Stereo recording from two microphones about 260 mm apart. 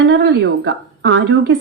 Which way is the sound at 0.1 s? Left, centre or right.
Right.